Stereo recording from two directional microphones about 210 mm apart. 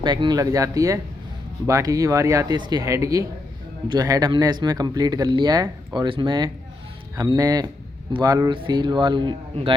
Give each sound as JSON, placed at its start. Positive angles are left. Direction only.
{"t": 0.0, "sound": "speech", "side_deg": -20}